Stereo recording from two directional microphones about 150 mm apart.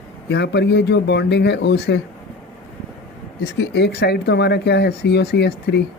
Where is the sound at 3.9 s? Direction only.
90° left.